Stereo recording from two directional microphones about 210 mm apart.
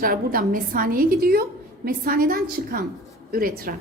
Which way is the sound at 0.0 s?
45° right (ahead or behind).